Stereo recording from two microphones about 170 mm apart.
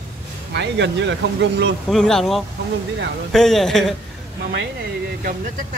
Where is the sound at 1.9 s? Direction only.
5° left (ahead or behind).